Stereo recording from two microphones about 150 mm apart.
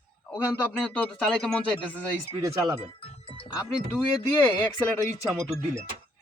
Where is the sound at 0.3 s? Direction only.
10° left (ahead or behind).